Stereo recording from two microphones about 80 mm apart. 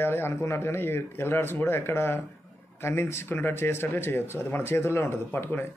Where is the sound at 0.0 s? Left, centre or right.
Left.